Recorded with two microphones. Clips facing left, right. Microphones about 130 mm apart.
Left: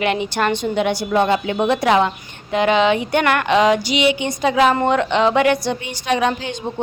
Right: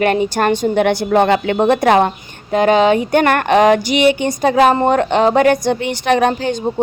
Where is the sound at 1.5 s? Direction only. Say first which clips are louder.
Right 4 dB; 50° right (ahead or behind).